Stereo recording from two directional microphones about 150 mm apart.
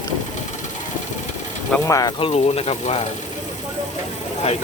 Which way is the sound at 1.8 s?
20° left (ahead or behind).